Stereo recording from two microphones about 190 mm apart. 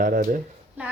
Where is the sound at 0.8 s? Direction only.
10° right (ahead or behind).